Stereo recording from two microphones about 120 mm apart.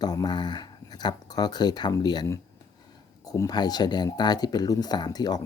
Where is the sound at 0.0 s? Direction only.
35° left (ahead or behind).